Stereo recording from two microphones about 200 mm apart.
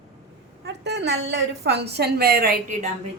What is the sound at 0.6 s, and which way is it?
A woman's voice, 60° right (ahead or behind).